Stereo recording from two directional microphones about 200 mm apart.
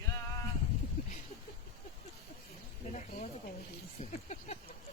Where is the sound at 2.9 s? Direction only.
35° left (ahead or behind).